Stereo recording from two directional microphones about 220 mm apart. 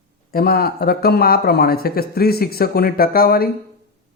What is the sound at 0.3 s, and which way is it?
A man's voice, 45° left (ahead or behind).